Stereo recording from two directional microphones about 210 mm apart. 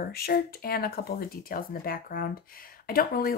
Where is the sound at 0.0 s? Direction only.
45° left (ahead or behind).